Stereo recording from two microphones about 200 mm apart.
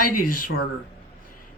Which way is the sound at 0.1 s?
45° left (ahead or behind).